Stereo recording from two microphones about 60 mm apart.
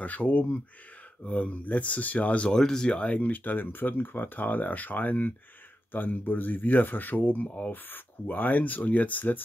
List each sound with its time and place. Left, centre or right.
0.0 s speech: left
2.5 s speech: centre; by 9.4 s left